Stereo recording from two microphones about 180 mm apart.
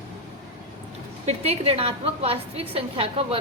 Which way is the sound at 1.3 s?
35° right (ahead or behind).